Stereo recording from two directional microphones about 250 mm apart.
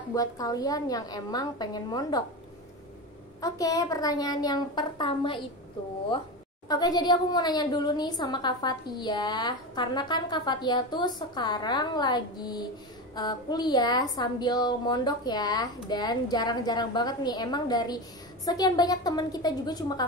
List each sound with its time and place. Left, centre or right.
0.1 s a woman's voice: centre
3.3 s a woman's voice: centre